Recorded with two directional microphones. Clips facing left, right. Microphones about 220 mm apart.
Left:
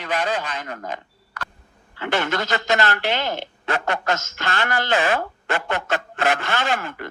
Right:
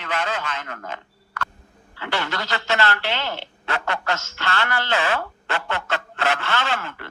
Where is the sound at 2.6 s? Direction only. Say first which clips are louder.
Right 2 dB; 15° left (ahead or behind).